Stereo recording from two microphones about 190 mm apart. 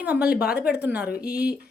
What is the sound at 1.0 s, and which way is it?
Speech, 55° left (ahead or behind).